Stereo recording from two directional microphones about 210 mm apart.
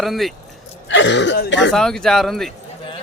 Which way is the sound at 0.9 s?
60° left (ahead or behind).